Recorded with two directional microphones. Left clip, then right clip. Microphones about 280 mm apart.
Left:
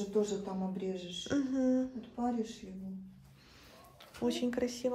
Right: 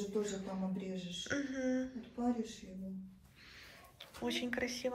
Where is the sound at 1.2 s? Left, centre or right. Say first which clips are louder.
Left 5 dB; centre.